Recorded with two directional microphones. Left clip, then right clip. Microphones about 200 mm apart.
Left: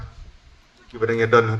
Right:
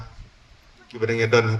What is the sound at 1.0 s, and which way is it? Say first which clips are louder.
Speech: left 2 dB; 45° left (ahead or behind).